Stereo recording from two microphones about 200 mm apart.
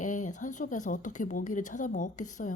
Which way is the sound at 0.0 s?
40° left (ahead or behind).